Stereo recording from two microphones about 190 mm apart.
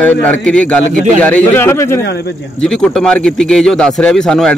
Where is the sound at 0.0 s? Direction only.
10° left (ahead or behind).